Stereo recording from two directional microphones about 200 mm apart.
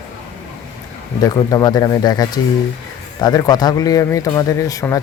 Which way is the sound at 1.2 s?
20° left (ahead or behind).